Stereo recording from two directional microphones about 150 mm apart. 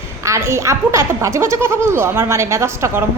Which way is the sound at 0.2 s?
20° right (ahead or behind).